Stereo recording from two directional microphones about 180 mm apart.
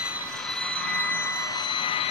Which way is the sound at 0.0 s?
Centre (ahead or behind).